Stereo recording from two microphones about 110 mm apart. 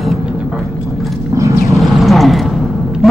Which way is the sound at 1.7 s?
Centre (ahead or behind).